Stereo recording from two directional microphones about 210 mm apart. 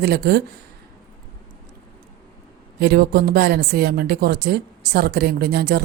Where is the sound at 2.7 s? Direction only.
50° right (ahead or behind).